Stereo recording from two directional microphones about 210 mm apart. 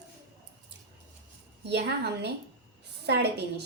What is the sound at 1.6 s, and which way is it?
A woman's voice, 55° right (ahead or behind).